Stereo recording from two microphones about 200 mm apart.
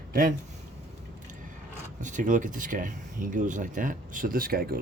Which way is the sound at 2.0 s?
40° right (ahead or behind).